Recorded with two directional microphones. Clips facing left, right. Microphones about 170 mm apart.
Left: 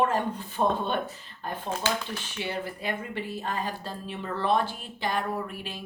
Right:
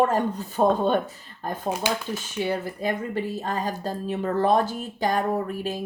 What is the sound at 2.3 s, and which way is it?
Speech, 45° right (ahead or behind).